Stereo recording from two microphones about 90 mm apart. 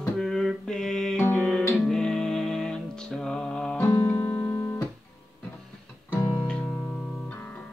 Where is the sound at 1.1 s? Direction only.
25° left (ahead or behind).